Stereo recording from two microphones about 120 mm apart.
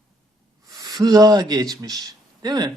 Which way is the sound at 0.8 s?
35° right (ahead or behind).